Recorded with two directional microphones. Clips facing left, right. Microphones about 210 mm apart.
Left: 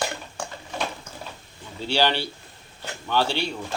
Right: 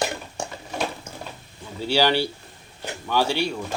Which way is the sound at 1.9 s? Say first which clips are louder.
Right 3 dB; 10° right (ahead or behind).